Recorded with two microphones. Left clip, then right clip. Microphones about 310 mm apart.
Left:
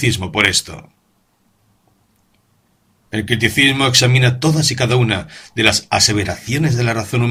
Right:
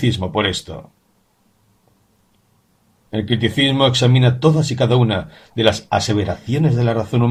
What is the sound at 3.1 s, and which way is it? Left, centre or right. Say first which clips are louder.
Speech: left 4 dB; left.